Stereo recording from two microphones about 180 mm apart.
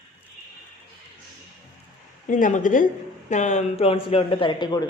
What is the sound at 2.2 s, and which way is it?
Speech, 45° left (ahead or behind).